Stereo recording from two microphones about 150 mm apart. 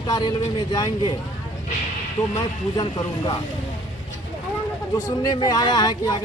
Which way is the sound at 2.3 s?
30° left (ahead or behind).